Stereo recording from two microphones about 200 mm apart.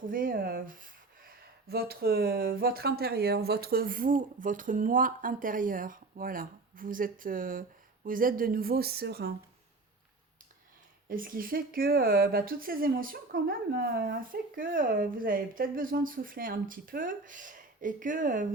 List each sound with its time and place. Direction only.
0.0 s speech: 45° right (ahead or behind)
11.1 s speech: 45° right (ahead or behind)